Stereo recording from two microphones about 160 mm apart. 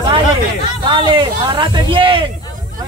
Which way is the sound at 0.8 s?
30° right (ahead or behind).